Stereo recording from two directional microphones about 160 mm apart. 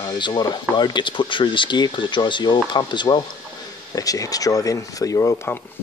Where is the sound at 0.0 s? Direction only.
25° left (ahead or behind).